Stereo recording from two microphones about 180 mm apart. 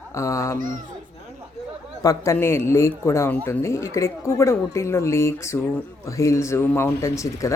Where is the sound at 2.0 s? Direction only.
15° left (ahead or behind).